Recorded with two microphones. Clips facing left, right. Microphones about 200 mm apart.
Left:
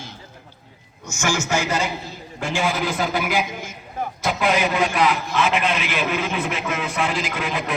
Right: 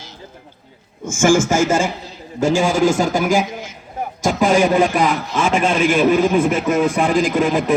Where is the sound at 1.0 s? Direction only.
50° right (ahead or behind).